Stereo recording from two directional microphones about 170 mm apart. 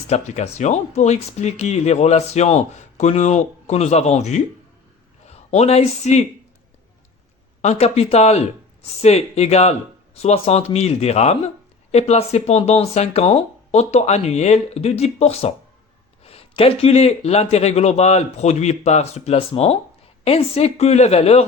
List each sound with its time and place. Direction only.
0.1 s a man's voice: 40° left (ahead or behind)
7.6 s speech: 40° left (ahead or behind)